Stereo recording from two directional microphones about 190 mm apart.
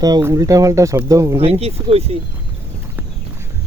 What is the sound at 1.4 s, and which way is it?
Speech, 30° right (ahead or behind).